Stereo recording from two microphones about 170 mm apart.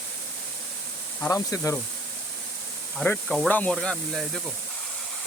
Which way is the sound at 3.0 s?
5° left (ahead or behind).